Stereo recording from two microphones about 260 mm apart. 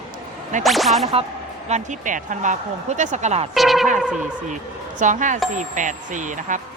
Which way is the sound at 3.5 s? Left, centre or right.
Centre.